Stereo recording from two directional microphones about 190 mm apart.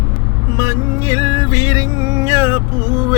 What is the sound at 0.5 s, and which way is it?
Music, 15° right (ahead or behind).